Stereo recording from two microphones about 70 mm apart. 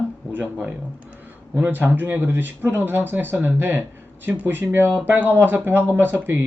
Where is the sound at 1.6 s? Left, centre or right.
Right.